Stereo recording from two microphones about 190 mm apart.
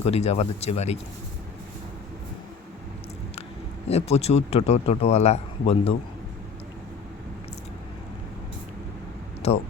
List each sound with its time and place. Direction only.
0.0 s speech: 35° left (ahead or behind)
3.8 s speech: 35° left (ahead or behind)
9.4 s speech: 35° left (ahead or behind)